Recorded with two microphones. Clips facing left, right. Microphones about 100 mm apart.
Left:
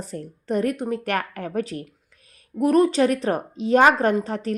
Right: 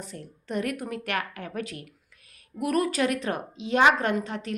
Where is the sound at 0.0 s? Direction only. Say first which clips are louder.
Left 7 dB; 40° left (ahead or behind).